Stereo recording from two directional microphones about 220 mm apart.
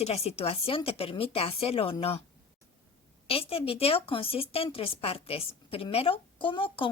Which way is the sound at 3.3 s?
25° left (ahead or behind).